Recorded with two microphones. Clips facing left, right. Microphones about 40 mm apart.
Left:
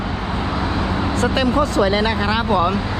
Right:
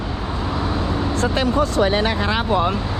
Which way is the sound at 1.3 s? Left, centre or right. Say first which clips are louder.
Left 1 dB; left.